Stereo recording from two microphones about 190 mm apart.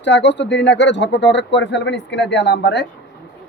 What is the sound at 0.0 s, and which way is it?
Speech, 70° left (ahead or behind).